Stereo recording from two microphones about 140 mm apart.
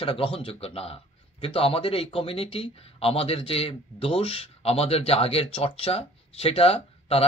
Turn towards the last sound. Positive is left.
turn(degrees=45)  # may be behind; listen again after turning